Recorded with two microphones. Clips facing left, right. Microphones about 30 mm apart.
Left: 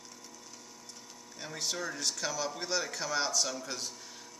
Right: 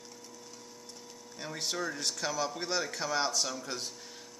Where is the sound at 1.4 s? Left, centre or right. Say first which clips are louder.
Right 1 dB; centre.